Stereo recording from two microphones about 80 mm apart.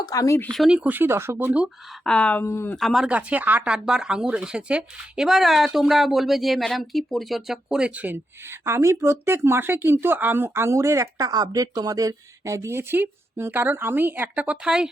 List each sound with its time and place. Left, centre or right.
0.1 s speech: left
0.7 s speech: centre
0.9 s speech: right
2.0 s speech: centre
2.4 s speech: left
2.7 s speech: centre
3.1 s speech: centre